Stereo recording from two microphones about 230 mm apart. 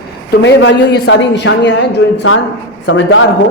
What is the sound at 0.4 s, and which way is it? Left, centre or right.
A man's voice, left.